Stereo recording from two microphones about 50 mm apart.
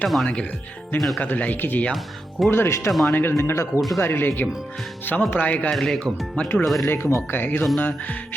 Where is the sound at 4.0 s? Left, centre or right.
Left.